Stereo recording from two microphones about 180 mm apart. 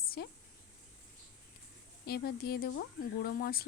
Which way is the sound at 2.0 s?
60° left (ahead or behind).